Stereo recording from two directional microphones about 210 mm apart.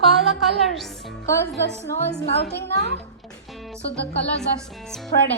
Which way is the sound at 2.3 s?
50° left (ahead or behind).